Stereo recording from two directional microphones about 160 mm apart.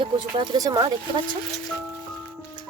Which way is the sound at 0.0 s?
30° right (ahead or behind).